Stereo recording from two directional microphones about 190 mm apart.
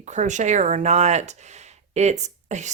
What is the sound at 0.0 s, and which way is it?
A woman's voice, 40° right (ahead or behind).